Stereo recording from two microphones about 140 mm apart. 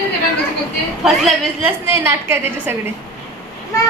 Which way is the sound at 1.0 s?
Centre (ahead or behind).